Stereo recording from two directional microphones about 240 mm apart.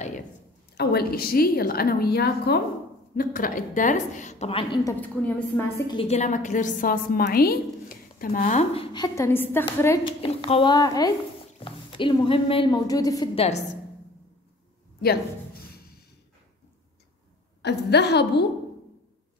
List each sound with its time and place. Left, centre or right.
0.7 s a woman's voice: left
5.0 s a woman's voice: centre
5.8 s a woman's voice: centre
8.9 s a woman's voice: centre
10.2 s a woman's voice: left
15.0 s a sound: left
17.6 s a woman's voice: left